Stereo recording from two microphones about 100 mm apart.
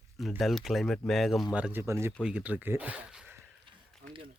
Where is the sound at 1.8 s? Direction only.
25° right (ahead or behind).